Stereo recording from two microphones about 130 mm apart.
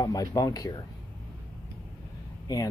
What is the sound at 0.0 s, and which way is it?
Speech, 30° left (ahead or behind).